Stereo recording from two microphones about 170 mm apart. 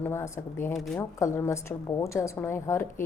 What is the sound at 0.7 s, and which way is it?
Speech, centre (ahead or behind).